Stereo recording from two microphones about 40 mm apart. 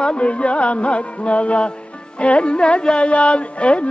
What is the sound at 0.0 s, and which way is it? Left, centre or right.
Music, left.